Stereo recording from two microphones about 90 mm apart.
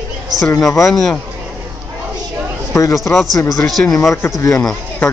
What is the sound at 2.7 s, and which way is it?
Speech, 35° left (ahead or behind).